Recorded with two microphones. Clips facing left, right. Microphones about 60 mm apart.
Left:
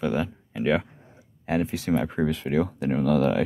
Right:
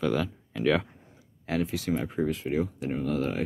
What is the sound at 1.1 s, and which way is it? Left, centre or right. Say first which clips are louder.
Speech: left 5 dB; left.